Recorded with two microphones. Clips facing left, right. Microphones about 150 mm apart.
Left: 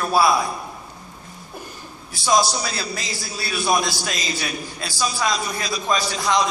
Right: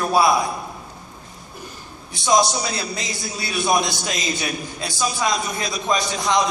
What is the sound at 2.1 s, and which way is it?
A man's voice, 20° right (ahead or behind).